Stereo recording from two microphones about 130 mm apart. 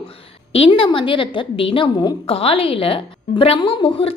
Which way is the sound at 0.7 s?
40° left (ahead or behind).